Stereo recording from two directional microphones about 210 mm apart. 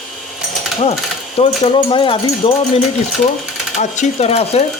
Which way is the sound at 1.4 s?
25° left (ahead or behind).